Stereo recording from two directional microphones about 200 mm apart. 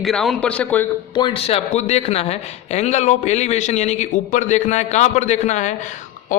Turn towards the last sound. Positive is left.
turn(degrees=35)  # may be behind; listen again after turning